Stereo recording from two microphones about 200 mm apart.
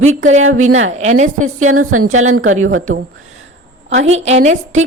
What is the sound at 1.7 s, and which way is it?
Speech, 90° right.